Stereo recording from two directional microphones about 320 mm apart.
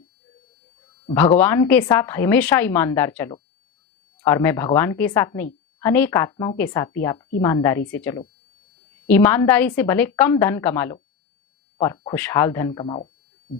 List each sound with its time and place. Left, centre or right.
1.1 s a woman's voice: centre